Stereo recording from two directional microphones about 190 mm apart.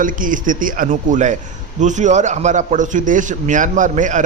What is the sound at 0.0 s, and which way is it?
A man's voice, 45° right (ahead or behind).